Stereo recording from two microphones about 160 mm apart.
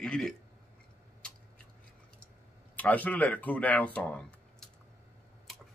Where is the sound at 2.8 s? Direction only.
10° left (ahead or behind).